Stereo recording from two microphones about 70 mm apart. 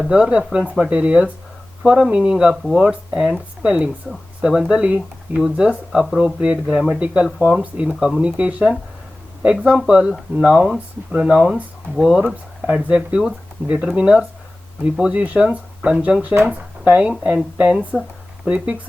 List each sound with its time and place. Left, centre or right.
0.1 s speech: centre
1.8 s speech: centre
7.3 s speech: centre
8.2 s speech: centre